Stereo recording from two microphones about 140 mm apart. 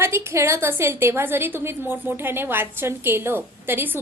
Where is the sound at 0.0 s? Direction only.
20° right (ahead or behind).